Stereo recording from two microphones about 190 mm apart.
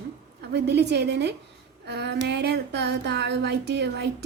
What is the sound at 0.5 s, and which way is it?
A woman's voice, 60° right (ahead or behind).